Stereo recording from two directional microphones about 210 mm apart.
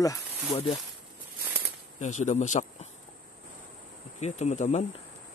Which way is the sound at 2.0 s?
35° left (ahead or behind).